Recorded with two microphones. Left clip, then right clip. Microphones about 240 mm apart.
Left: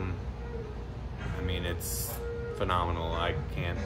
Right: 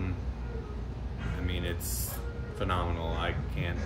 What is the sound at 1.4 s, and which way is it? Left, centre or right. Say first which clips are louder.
Speech: left 2 dB; centre.